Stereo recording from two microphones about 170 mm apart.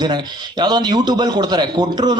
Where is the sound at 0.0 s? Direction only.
25° right (ahead or behind).